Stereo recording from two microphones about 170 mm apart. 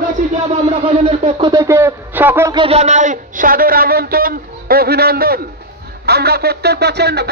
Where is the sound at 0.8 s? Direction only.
35° right (ahead or behind).